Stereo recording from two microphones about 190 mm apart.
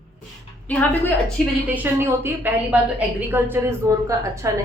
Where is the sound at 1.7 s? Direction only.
10° right (ahead or behind).